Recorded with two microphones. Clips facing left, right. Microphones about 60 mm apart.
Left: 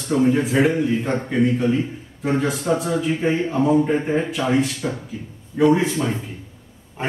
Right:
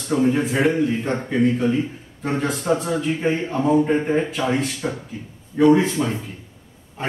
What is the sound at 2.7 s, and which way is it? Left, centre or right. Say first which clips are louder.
Speech: right 1 dB; right.